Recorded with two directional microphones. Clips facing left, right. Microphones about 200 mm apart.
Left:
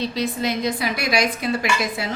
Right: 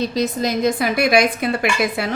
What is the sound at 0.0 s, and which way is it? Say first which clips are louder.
A woman's voice: right 3 dB; 45° right (ahead or behind).